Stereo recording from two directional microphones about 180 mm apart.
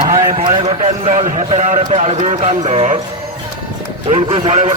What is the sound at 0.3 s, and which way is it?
A man's voice, 30° right (ahead or behind).